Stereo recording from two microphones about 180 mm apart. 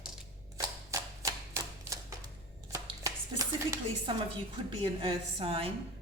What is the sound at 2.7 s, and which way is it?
Chopping, 20° right (ahead or behind).